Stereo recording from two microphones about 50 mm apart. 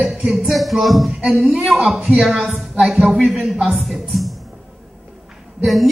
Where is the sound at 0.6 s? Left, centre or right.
Centre.